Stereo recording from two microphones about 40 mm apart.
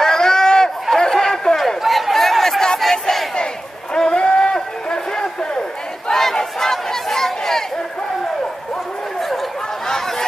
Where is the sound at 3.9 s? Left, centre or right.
Centre.